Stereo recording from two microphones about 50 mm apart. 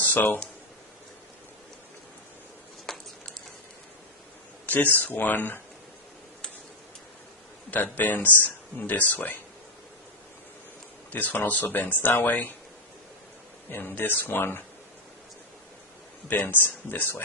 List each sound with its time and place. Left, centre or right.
0.0 s a sound: left
2.8 s a sound: centre
4.6 s speech: left
7.7 s speech: left
11.1 s speech: left
13.7 s speech: left
16.3 s speech: left